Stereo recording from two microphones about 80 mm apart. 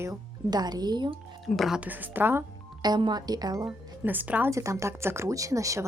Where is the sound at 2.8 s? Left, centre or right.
Right.